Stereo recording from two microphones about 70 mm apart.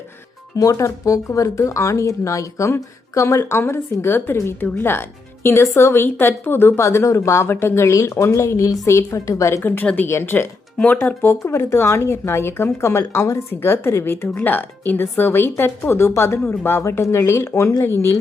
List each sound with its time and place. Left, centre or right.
0.5 s a woman's voice: left
7.4 s a woman's voice: left
9.6 s a woman's voice: left
10.1 s a woman's voice: left
11.3 s a woman's voice: left